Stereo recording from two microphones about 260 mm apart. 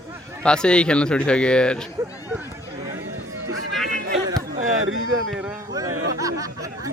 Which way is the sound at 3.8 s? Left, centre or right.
Right.